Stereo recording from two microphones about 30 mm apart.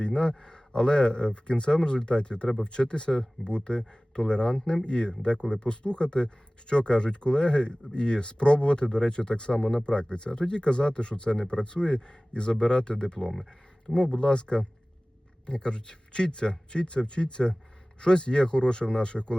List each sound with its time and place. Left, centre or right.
0.0 s speech: left
9.6 s speech: centre
9.8 s speech: left
13.1 s speech: centre
13.9 s speech: left